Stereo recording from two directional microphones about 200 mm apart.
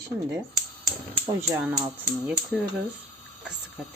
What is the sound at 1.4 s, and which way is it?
Speech, 10° right (ahead or behind).